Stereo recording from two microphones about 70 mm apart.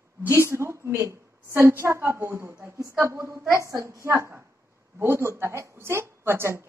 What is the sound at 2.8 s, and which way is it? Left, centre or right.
A woman's voice, right.